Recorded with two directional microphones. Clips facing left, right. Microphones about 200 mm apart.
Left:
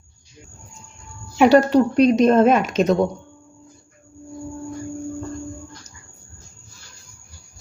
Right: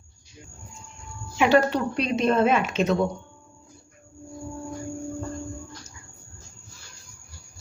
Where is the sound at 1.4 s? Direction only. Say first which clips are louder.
Left 7 dB; 40° left (ahead or behind).